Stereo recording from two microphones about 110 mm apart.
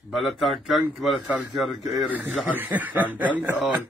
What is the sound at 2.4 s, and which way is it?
Speech, 15° right (ahead or behind).